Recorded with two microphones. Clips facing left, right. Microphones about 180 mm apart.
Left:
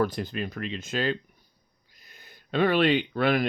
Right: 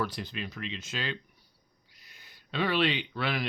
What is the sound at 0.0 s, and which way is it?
Speech, 50° left (ahead or behind).